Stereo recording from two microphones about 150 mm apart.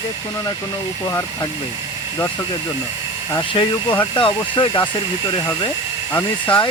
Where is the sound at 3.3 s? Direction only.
30° left (ahead or behind).